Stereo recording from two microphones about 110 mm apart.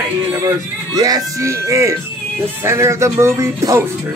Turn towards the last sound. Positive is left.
turn(degrees=-30)  # may be behind; listen again after turning